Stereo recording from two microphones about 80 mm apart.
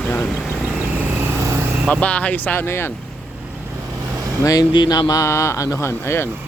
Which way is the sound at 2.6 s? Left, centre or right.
Left.